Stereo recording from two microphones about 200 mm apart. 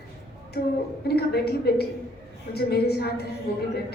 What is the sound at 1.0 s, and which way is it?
A woman's voice, 55° left (ahead or behind).